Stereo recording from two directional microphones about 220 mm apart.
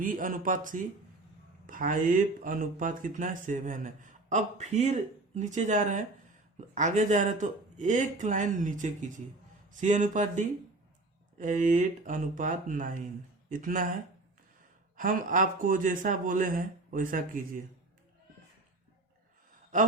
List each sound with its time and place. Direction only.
0.0 s speech: 40° right (ahead or behind)
14.9 s speech: 35° right (ahead or behind)